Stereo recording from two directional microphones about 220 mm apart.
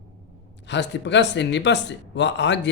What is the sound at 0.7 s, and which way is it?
Speech, 50° left (ahead or behind).